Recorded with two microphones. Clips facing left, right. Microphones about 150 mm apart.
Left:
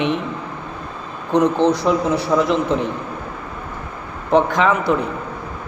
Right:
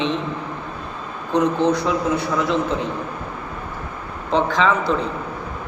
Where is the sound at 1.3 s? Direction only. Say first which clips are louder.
Left 2 dB; 20° left (ahead or behind).